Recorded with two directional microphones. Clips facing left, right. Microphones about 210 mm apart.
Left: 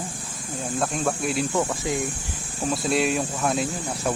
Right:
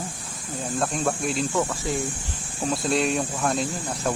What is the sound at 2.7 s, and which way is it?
Speech, centre (ahead or behind).